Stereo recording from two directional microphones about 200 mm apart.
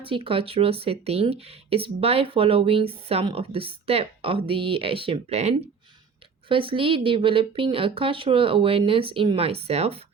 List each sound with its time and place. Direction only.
0.0 s speech: 25° right (ahead or behind)